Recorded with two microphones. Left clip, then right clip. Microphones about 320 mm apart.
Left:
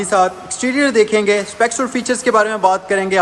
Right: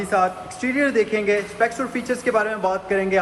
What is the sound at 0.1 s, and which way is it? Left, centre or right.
A man's voice, left.